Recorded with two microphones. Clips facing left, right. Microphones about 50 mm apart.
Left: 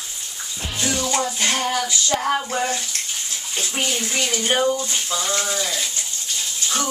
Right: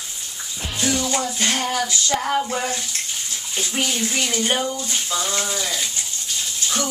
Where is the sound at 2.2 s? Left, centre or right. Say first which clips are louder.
Even; centre.